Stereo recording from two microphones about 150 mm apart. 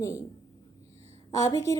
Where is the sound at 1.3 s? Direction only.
25° left (ahead or behind).